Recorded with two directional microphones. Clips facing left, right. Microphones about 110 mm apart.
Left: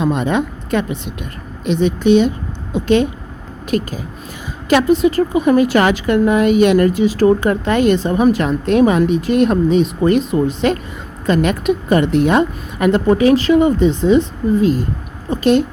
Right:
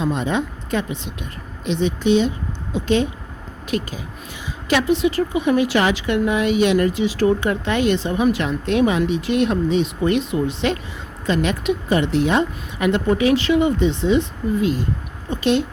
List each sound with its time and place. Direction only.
0.0 s speech: 60° left (ahead or behind)